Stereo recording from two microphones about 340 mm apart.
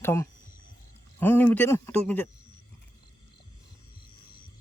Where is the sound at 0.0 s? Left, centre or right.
Centre.